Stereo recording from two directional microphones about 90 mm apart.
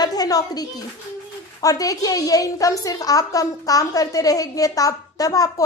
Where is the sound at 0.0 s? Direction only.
45° left (ahead or behind).